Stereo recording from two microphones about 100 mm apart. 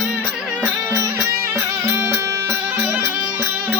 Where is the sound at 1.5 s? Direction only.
25° right (ahead or behind).